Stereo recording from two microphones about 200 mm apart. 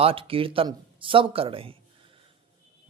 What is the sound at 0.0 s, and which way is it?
A man's voice, 25° right (ahead or behind).